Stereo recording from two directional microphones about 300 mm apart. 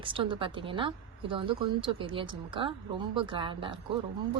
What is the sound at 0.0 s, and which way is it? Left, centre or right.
Speech, centre.